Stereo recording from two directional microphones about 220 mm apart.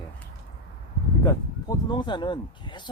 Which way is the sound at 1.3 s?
20° left (ahead or behind).